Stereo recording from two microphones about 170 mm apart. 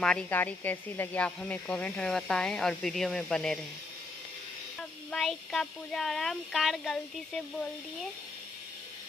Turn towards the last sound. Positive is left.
turn(degrees=0)  # may be behind; listen again after turning